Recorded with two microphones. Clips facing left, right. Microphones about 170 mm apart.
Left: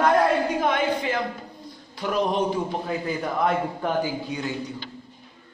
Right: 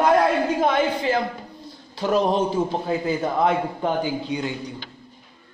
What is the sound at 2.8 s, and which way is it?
A man's voice, 25° right (ahead or behind).